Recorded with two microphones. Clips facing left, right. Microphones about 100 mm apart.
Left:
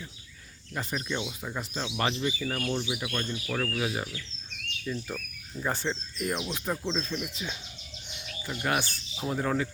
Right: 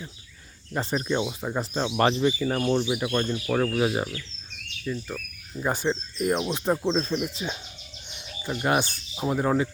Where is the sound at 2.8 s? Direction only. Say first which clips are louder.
Right 7 dB; 50° right (ahead or behind).